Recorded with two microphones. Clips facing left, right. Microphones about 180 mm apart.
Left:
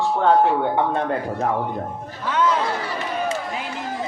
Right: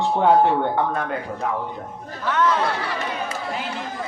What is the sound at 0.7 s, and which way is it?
Speech, 30° left (ahead or behind).